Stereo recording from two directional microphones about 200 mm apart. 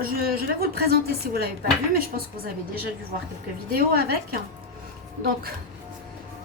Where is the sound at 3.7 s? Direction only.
50° right (ahead or behind).